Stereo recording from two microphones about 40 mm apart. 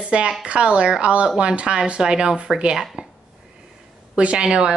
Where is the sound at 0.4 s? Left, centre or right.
Right.